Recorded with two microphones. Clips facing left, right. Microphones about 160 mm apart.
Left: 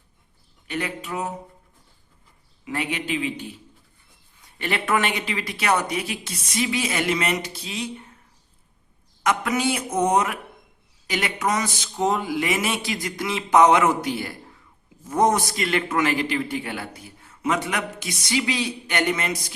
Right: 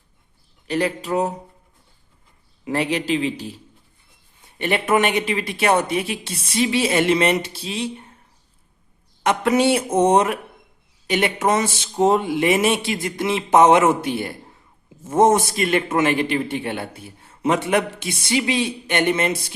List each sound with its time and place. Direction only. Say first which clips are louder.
0.7 s a man's voice: right 8 dB; 35° right (ahead or behind)
2.6 s a man's voice: right 6 dB; 35° right (ahead or behind)
4.4 s a man's voice: right 5 dB; 25° right (ahead or behind)
9.2 s a man's voice: right 5 dB; 30° right (ahead or behind)